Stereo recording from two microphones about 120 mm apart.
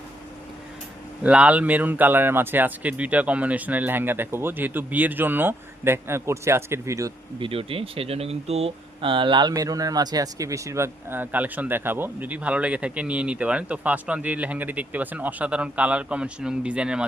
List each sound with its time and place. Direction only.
1.2 s speech: 10° right (ahead or behind)
7.3 s speech: 50° right (ahead or behind)
9.5 s speech: 30° right (ahead or behind); by 17.0 s 10° right (ahead or behind)